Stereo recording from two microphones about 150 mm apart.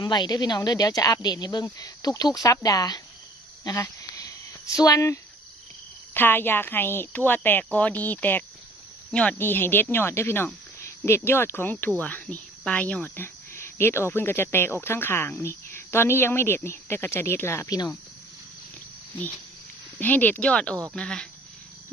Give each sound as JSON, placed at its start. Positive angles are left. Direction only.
{"t": 0.0, "sound": "speech", "side_deg": 30}
{"t": 3.6, "sound": "a sound", "side_deg": 20}
{"t": 6.1, "sound": "speech", "side_deg": 15}
{"t": 20.0, "sound": "speech", "side_deg": 10}